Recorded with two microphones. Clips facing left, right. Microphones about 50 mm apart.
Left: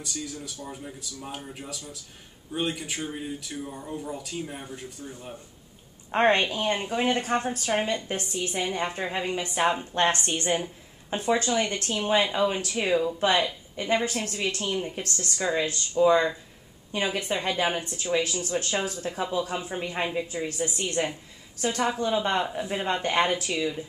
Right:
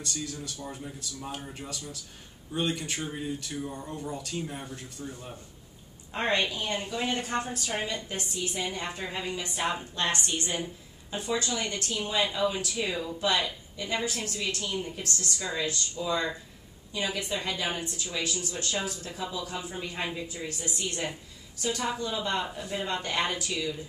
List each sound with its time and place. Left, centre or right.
0.0 s speech: centre
6.1 s a woman's voice: left
8.6 s a woman's voice: left